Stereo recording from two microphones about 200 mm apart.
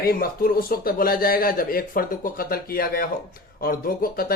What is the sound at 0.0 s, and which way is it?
Speech, 50° left (ahead or behind).